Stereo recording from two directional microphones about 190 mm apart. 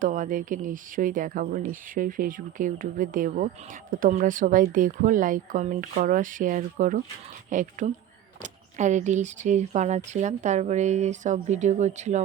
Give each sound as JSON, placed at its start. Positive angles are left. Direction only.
{"t": 0.0, "sound": "speech", "side_deg": -45}